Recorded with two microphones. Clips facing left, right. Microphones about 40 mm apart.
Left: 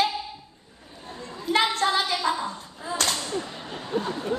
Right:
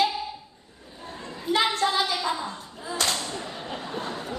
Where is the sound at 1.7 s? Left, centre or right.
Left.